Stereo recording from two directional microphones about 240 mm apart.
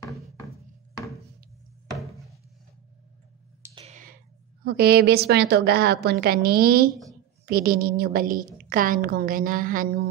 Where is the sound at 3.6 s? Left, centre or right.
Right.